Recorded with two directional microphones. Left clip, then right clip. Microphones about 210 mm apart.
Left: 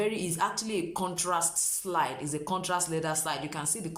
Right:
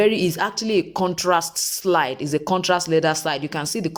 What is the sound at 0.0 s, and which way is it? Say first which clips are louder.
Speech: right 10 dB; 35° right (ahead or behind).